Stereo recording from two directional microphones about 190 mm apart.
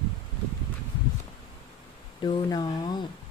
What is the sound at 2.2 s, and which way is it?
Speech, 20° left (ahead or behind).